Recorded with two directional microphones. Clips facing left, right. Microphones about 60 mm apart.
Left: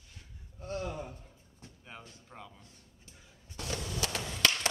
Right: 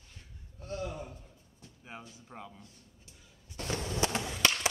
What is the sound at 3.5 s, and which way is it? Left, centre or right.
Walk, right.